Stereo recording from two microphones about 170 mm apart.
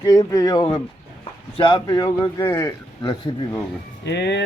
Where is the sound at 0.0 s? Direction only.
20° left (ahead or behind).